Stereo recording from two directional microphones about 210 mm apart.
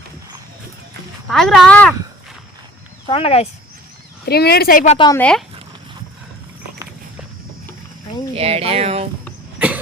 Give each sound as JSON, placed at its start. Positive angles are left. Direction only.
{"t": 1.3, "sound": "speech", "side_deg": 0}
{"t": 3.1, "sound": "speech", "side_deg": 25}
{"t": 4.3, "sound": "speech", "side_deg": 50}
{"t": 4.9, "sound": "speech", "side_deg": 20}
{"t": 8.4, "sound": "speech", "side_deg": -30}
{"t": 9.6, "sound": "vehicle", "side_deg": -5}